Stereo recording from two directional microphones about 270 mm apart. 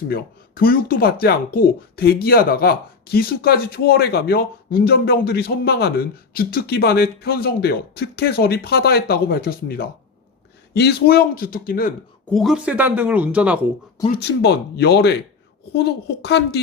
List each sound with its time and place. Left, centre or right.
0.1 s speech: left
12.3 s speech: centre
14.1 s speech: left